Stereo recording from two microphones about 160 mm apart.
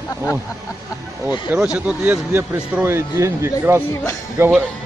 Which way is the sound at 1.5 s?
5° right (ahead or behind).